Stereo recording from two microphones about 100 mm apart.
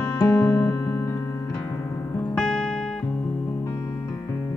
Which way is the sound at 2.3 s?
5° left (ahead or behind).